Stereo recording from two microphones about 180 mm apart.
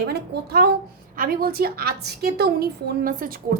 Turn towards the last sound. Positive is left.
turn(degrees=-55)  # may be behind; listen again after turning